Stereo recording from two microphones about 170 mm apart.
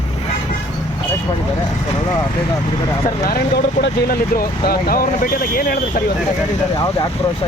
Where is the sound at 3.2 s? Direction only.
70° left (ahead or behind).